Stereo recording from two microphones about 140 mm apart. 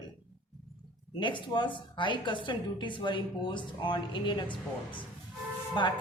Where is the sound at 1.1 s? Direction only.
35° left (ahead or behind).